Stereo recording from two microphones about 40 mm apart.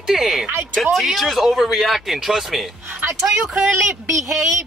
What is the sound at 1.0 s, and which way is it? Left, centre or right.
Speech, centre.